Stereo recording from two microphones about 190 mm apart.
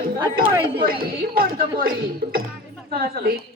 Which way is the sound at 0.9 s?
50° right (ahead or behind).